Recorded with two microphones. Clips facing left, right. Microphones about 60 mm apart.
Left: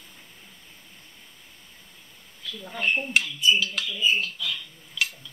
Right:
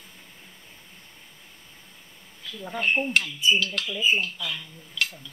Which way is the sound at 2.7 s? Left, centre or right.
Centre.